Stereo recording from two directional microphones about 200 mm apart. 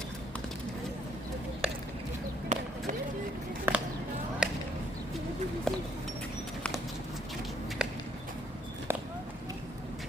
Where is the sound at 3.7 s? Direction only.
10° right (ahead or behind).